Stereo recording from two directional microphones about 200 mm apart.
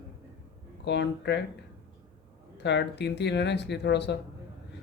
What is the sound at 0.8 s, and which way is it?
Speech, 60° left (ahead or behind).